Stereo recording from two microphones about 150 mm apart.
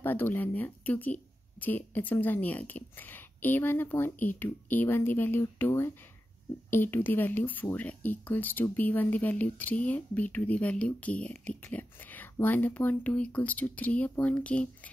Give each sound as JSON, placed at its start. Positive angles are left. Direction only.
{"t": 0.0, "sound": "speech", "side_deg": 15}